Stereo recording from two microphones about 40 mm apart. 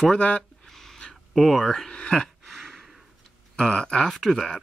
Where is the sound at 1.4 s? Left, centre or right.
Centre.